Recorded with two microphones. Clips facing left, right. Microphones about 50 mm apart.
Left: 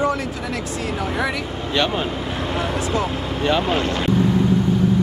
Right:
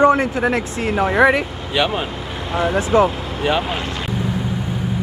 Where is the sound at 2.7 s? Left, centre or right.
Right.